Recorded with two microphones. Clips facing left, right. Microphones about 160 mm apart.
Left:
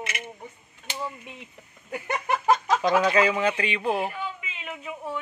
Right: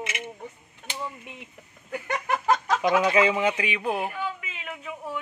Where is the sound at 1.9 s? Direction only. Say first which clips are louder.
Left 1 dB; 20° left (ahead or behind).